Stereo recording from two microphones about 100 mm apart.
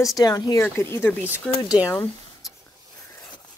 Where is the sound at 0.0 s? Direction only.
35° left (ahead or behind).